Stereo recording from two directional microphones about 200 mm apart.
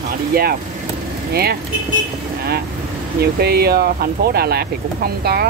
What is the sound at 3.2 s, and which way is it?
Speech, 50° right (ahead or behind).